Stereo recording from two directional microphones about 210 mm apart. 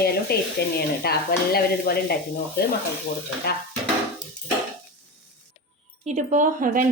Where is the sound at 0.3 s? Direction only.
50° left (ahead or behind).